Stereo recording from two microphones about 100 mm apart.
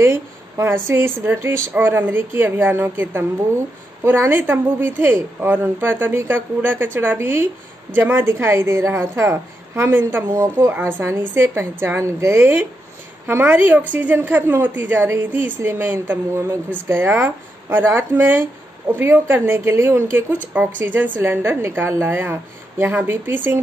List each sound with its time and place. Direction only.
0.0 s a woman's voice: 25° right (ahead or behind)
10.6 s speech: 20° right (ahead or behind)